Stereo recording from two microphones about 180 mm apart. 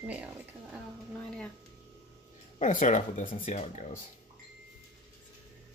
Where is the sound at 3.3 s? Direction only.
35° left (ahead or behind).